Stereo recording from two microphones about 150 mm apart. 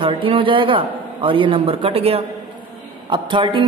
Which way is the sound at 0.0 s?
35° right (ahead or behind).